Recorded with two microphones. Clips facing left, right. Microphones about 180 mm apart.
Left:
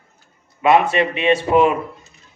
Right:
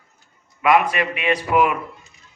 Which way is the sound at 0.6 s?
25° left (ahead or behind).